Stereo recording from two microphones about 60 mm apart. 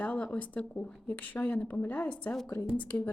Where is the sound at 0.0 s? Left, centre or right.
Left.